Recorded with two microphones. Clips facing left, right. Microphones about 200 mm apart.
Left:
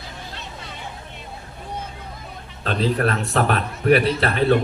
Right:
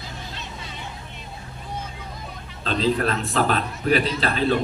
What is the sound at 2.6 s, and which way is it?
A man's voice, 60° left (ahead or behind).